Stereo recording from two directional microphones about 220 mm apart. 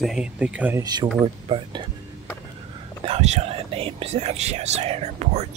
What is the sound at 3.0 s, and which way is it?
Speech, 30° right (ahead or behind).